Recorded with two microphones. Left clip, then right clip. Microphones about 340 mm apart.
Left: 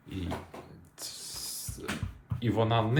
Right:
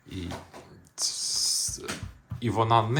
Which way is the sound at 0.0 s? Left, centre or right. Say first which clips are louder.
Even; centre.